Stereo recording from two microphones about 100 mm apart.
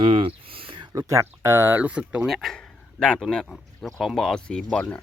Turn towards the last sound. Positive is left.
turn(degrees=10)  # may be behind; listen again after turning